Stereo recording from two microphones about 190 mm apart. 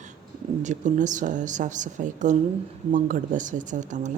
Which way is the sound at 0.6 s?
40° right (ahead or behind).